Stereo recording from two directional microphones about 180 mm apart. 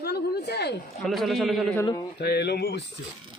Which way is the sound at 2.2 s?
65° left (ahead or behind).